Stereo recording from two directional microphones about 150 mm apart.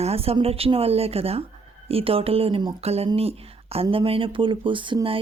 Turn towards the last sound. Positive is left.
turn(degrees=-35)  # may be behind; listen again after turning